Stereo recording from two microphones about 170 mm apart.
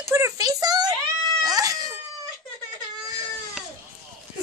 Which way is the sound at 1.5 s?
20° right (ahead or behind).